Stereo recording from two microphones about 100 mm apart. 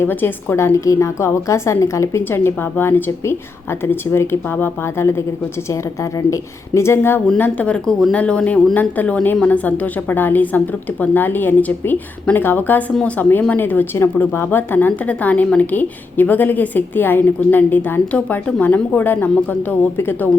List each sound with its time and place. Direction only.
0.0 s a woman's voice: 20° left (ahead or behind)
7.3 s a woman's voice: 15° left (ahead or behind)